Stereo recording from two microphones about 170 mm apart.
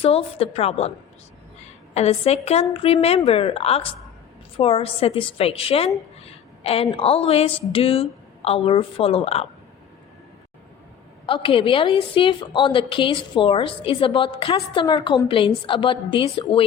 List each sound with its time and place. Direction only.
0.0 s a woman's voice: 35° left (ahead or behind)
6.2 s a sound: 35° left (ahead or behind)
6.9 s a woman's voice: 35° left (ahead or behind)
11.3 s a woman's voice: 30° left (ahead or behind)